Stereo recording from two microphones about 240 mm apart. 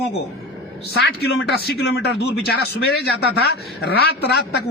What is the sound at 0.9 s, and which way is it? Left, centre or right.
A man's voice, left.